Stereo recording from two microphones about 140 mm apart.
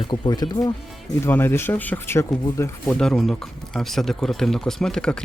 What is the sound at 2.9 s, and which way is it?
Speech, 5° left (ahead or behind).